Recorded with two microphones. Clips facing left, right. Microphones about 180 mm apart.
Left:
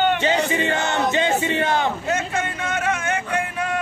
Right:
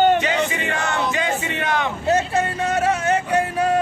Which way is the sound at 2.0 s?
35° right (ahead or behind).